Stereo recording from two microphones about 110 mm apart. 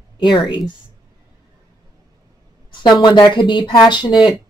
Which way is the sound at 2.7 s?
45° left (ahead or behind).